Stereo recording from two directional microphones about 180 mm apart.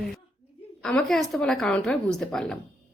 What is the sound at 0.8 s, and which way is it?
Speech, 5° left (ahead or behind).